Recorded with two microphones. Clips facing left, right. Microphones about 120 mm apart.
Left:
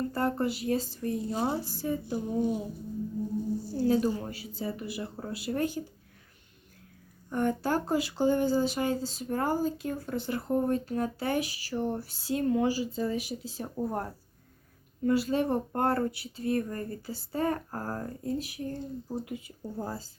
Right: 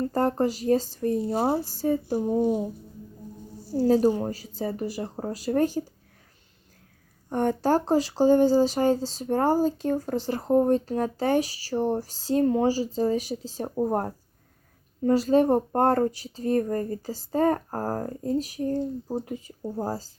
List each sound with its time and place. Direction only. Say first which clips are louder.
0.1 s speech: right 5 dB; 40° right (ahead or behind)
3.8 s speech: right 7 dB; 35° right (ahead or behind)
7.4 s speech: right 6 dB; 40° right (ahead or behind)